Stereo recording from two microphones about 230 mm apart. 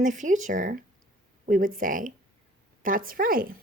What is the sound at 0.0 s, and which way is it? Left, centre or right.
A woman's voice, right.